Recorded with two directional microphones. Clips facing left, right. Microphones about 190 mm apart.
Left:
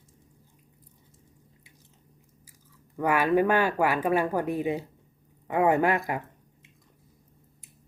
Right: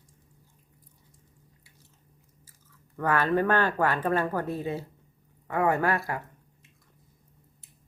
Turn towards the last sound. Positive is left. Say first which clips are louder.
# left 3 dB
turn(degrees=15)  # may be behind; listen again after turning